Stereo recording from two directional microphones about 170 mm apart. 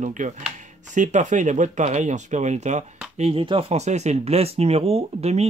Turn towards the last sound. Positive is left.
turn(degrees=-40)  # may be behind; listen again after turning